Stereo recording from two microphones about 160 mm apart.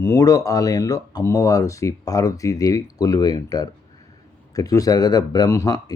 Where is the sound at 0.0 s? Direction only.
20° left (ahead or behind).